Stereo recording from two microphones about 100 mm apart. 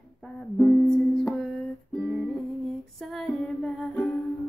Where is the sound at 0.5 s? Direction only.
Centre (ahead or behind).